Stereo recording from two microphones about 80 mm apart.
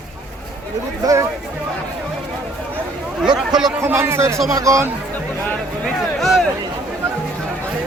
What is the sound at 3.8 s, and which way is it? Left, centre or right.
A man's voice, right.